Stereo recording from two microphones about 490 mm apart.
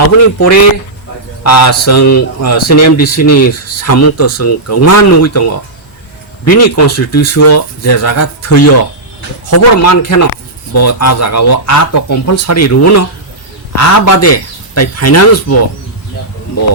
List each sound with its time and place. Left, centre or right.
1.5 s speech: left